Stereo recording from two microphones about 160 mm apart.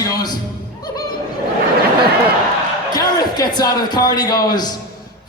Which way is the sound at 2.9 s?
25° left (ahead or behind).